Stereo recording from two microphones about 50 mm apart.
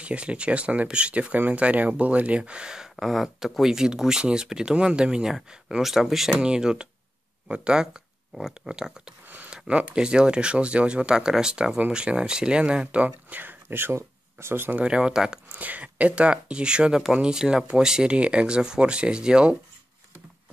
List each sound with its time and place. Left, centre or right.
0.0 s speech: right
3.0 s speech: centre
6.3 s speech: centre
13.3 s speech: right
14.8 s speech: centre
15.5 s speech: right